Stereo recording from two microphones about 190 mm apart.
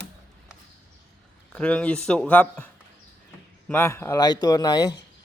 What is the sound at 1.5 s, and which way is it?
Speech, 5° left (ahead or behind).